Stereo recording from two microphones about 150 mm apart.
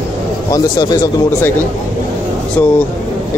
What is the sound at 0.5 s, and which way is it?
Speech, 25° left (ahead or behind).